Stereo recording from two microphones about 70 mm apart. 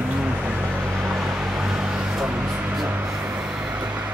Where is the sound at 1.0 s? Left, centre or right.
Centre.